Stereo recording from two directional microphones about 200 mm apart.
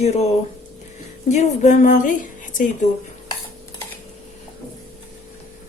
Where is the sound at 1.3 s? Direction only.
35° left (ahead or behind).